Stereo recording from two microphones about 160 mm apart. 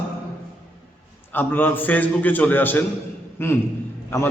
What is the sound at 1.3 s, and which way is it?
A man's voice, 10° left (ahead or behind).